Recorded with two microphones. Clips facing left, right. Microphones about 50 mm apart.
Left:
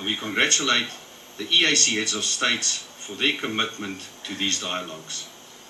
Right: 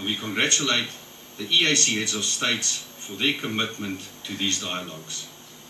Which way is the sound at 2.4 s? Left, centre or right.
Left.